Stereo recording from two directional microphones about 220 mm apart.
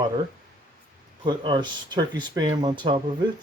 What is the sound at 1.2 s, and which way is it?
Speech, 20° right (ahead or behind).